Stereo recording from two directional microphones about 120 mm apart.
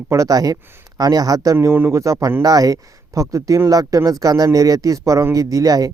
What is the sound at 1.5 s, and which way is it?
Speech, 20° right (ahead or behind).